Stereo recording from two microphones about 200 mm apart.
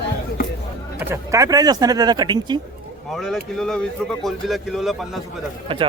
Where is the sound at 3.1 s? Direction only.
Centre (ahead or behind).